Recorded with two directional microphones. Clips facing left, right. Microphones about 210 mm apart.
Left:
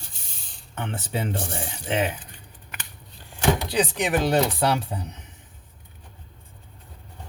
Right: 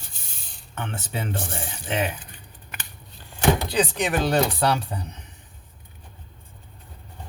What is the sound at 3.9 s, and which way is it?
Speech, 15° left (ahead or behind).